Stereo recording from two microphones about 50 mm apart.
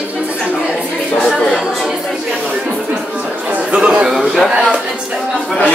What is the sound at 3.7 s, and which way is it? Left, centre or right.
Speech, centre.